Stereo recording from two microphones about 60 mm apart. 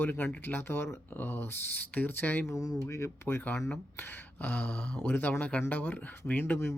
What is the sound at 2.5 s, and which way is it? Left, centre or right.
Speech, left.